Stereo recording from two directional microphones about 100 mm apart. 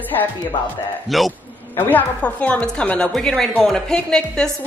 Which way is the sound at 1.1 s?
Centre (ahead or behind).